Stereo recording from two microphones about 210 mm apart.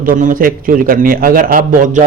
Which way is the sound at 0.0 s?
40° right (ahead or behind).